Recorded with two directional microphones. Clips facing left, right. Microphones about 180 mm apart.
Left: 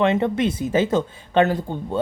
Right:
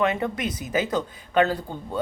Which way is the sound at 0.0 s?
25° left (ahead or behind).